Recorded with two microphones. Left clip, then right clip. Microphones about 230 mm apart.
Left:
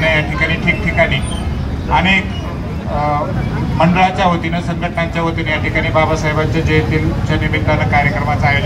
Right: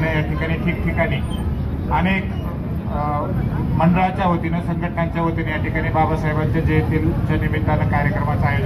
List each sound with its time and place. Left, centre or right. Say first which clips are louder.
0.7 s vehicle: left 8 dB; left
1.9 s a man's voice: left 8 dB; left
3.7 s a man's voice: left 6 dB; left